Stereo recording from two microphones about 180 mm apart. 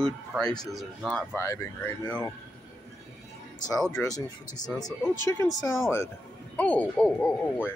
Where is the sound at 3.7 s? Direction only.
5° left (ahead or behind).